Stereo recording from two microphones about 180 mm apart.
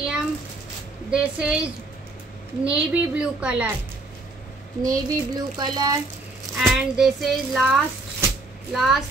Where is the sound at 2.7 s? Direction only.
5° right (ahead or behind).